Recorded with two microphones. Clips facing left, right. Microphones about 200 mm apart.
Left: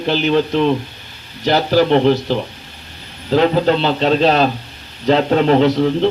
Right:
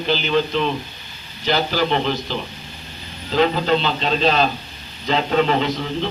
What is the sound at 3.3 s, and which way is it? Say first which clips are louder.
A man's voice: left 4 dB; 60° left (ahead or behind).